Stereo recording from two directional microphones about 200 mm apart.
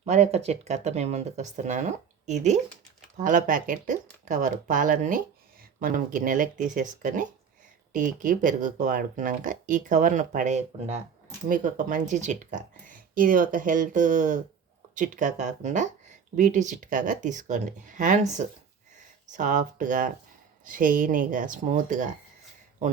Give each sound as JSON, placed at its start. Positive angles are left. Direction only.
{"t": 0.0, "sound": "speech", "side_deg": -35}